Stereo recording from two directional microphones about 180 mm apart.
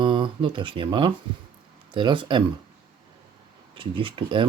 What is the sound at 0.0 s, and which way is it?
Speech, 25° right (ahead or behind).